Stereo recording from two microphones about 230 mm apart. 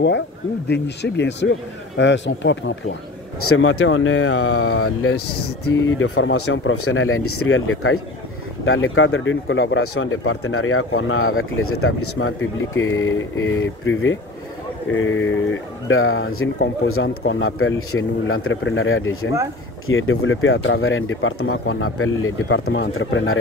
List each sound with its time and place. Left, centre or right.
0.7 s speech: left
3.4 s speech: left
5.9 s speech: left